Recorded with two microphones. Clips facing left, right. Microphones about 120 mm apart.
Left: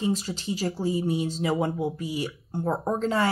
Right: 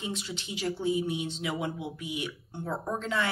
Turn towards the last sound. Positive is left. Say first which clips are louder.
# left 6 dB
turn(degrees=40)  # may be behind; listen again after turning